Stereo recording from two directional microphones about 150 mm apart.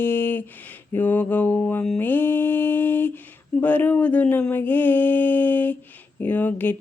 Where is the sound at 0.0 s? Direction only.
15° left (ahead or behind).